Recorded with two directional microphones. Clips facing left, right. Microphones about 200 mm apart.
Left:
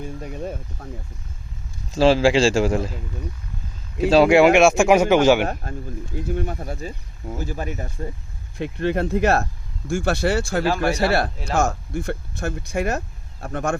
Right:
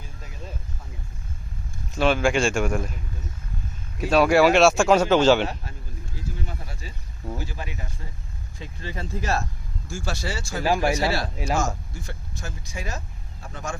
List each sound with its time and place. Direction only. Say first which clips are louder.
0.0 s speech: left 12 dB; 60° left (ahead or behind)
2.0 s a man's voice: left 5 dB; 30° left (ahead or behind)
4.1 s a man's voice: left 4 dB; 25° left (ahead or behind)
6.1 s speech: left 10 dB; 60° left (ahead or behind)
8.5 s speech: left 13 dB; 65° left (ahead or behind)
10.6 s speech: left 2 dB; 15° right (ahead or behind)
10.8 s speech: left 4 dB; 60° left (ahead or behind)